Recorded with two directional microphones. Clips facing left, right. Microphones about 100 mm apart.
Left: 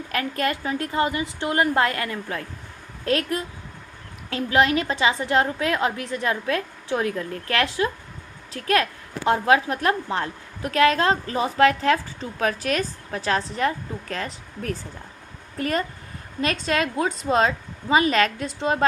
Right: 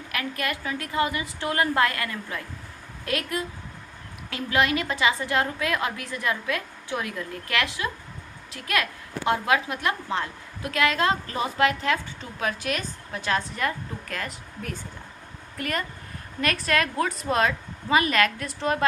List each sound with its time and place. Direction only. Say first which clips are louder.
0.1 s a woman's voice: left 5 dB; 35° left (ahead or behind)
15.5 s speech: left 5 dB; 30° left (ahead or behind)